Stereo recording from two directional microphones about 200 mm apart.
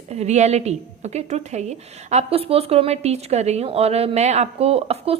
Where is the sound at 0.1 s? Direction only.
35° right (ahead or behind).